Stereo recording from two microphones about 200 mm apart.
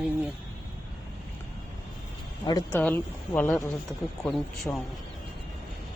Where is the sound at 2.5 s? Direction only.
20° left (ahead or behind); by 4.8 s centre (ahead or behind).